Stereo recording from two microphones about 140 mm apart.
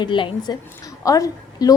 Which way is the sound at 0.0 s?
35° left (ahead or behind).